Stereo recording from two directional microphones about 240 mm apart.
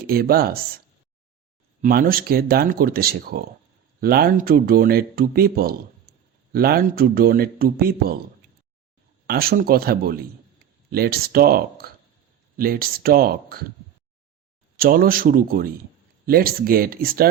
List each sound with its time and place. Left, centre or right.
0.0 s speech: right
1.8 s speech: right
9.2 s speech: right
14.8 s speech: right